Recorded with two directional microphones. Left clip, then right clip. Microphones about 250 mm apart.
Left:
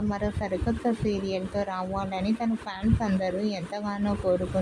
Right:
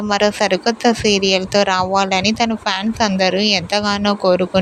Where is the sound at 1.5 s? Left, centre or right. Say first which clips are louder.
Right 16 dB; right.